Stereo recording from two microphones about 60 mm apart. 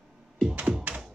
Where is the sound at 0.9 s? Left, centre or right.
Right.